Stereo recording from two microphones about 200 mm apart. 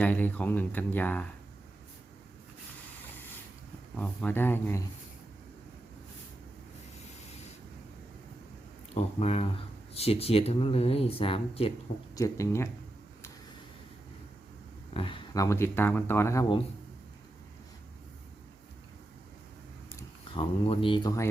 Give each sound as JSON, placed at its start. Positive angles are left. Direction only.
{"t": 0.0, "sound": "speech", "side_deg": 10}
{"t": 3.9, "sound": "speech", "side_deg": 10}
{"t": 9.0, "sound": "speech", "side_deg": 30}
{"t": 12.1, "sound": "speech", "side_deg": 15}
{"t": 14.9, "sound": "speech", "side_deg": 25}
{"t": 20.3, "sound": "speech", "side_deg": 25}